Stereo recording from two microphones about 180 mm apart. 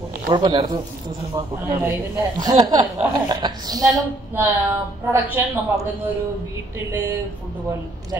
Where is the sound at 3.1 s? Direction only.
25° right (ahead or behind).